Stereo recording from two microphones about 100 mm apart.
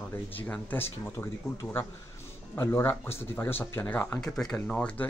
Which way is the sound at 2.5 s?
25° left (ahead or behind).